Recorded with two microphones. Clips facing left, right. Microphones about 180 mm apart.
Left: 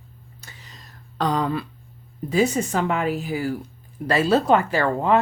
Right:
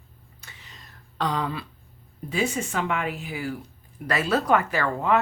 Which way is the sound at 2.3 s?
40° left (ahead or behind).